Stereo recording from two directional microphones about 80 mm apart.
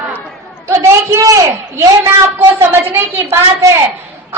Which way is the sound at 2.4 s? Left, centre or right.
Right.